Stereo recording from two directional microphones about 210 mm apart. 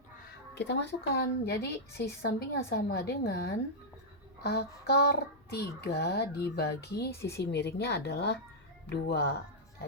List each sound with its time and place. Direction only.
0.5 s a woman's voice: 55° left (ahead or behind)
7.2 s speech: 15° left (ahead or behind)
7.4 s a woman's voice: 50° left (ahead or behind)